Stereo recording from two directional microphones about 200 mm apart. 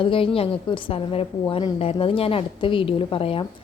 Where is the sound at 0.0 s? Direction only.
25° left (ahead or behind).